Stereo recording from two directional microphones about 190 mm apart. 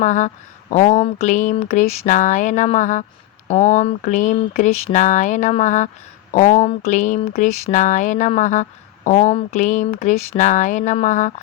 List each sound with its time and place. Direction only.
0.0 s speech: 40° left (ahead or behind)